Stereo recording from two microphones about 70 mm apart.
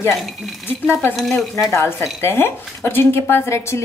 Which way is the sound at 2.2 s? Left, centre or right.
Left.